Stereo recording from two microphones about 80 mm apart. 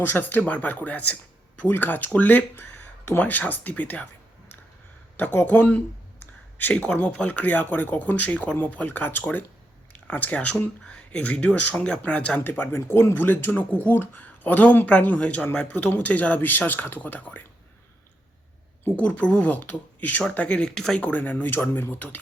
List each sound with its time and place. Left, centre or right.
0.0 s speech: left
5.1 s speech: left
12.4 s speech: left
18.9 s speech: centre
21.0 s speech: centre